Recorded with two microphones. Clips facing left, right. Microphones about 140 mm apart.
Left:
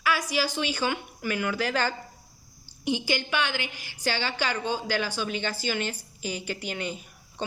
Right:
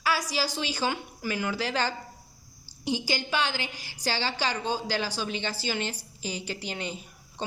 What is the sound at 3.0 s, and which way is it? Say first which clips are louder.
A woman's voice: left 1 dB; 35° right (ahead or behind).